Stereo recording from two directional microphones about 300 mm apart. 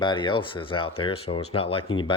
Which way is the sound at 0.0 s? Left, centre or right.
Centre.